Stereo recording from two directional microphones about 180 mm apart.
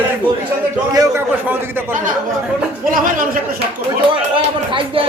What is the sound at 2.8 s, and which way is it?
Speech, 50° right (ahead or behind).